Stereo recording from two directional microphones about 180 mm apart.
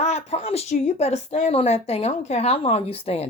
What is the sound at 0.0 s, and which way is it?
A woman's voice, 35° left (ahead or behind).